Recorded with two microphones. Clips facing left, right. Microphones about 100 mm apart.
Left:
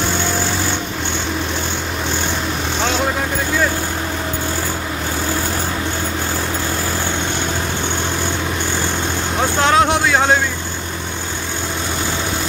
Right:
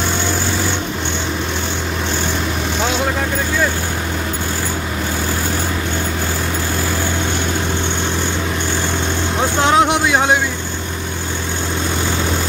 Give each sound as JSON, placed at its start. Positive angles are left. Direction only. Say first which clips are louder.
{"t": 9.6, "sound": "vehicle", "louder": "right 1 dB", "side_deg": -20}